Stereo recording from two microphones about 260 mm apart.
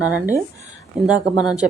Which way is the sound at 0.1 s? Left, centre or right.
Centre.